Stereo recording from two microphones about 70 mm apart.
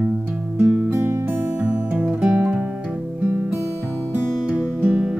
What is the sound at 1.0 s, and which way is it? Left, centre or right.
Music, right.